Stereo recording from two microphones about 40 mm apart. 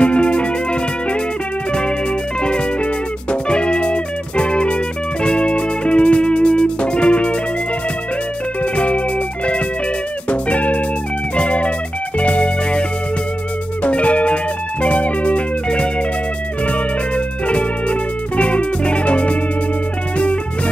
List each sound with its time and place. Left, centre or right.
0.0 s music: left
2.4 s music: left
8.7 s music: left
10.3 s music: left
13.8 s music: left
17.5 s music: left